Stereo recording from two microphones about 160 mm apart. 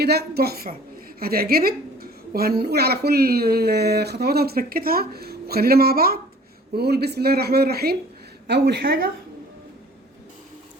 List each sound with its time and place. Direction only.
0.0 s a woman's voice: 85° right
6.7 s speech: 90° right
8.4 s a woman's voice: 90° right; by 9.0 s 75° right (ahead or behind)